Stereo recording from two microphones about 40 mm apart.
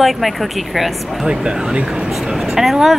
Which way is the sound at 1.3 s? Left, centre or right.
Right.